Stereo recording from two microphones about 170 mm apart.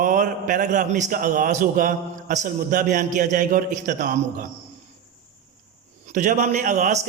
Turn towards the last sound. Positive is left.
turn(degrees=-45)  # may be behind; listen again after turning